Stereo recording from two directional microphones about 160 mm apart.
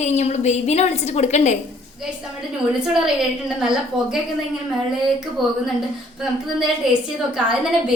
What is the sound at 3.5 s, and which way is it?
A woman's voice, 5° right (ahead or behind).